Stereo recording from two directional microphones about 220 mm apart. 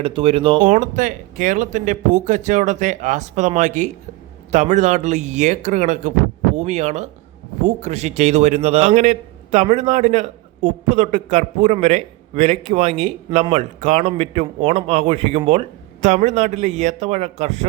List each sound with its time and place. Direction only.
0.0 s a man's voice: 25° right (ahead or behind)